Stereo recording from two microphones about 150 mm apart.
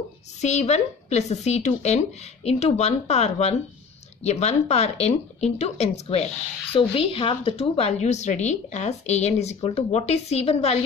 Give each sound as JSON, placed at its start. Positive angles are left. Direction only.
{"t": 0.4, "sound": "a woman's voice", "side_deg": 50}